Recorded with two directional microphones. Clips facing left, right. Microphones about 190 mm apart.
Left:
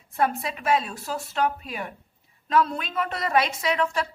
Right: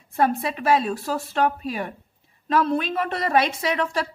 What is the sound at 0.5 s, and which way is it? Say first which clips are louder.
A woman's voice: right 4 dB; 35° right (ahead or behind).